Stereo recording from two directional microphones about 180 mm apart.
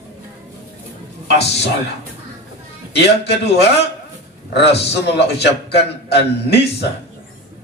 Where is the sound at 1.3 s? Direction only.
70° left (ahead or behind).